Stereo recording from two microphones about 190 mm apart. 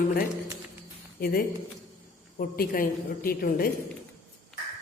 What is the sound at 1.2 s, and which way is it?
A woman's voice, 50° left (ahead or behind).